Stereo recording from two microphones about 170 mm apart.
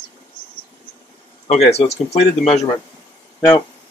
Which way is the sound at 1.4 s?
40° left (ahead or behind).